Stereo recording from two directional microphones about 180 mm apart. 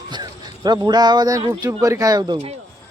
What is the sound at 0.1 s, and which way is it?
Speech, 25° right (ahead or behind).